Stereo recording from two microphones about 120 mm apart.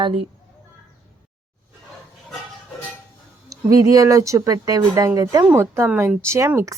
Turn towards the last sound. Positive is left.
turn(degrees=-25)  # may be behind; listen again after turning